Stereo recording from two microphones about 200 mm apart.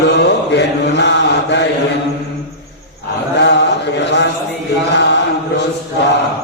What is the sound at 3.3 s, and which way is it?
Mantra, 60° left (ahead or behind).